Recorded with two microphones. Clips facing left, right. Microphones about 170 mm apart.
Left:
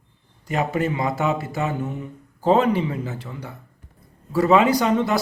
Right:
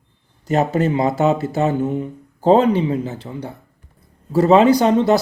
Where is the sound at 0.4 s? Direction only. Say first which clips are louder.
Right 5 dB; 40° right (ahead or behind).